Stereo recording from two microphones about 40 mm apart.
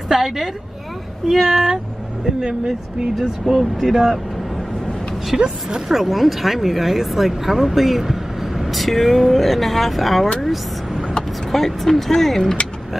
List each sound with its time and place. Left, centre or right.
0.1 s a sound: centre
1.5 s speech: centre
3.5 s speech: centre
5.3 s speech: centre
5.9 s speech: centre